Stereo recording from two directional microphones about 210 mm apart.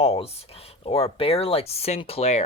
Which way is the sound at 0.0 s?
30° left (ahead or behind).